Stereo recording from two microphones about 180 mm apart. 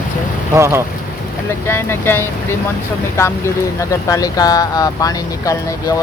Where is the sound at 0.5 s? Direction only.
15° right (ahead or behind).